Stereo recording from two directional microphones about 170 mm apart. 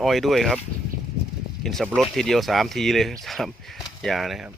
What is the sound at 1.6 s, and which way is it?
Speech, centre (ahead or behind).